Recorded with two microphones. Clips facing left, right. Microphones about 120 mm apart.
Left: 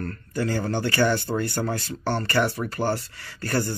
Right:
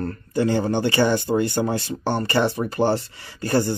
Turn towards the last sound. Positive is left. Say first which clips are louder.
# right 5 dB
turn(degrees=-20)  # may be behind; listen again after turning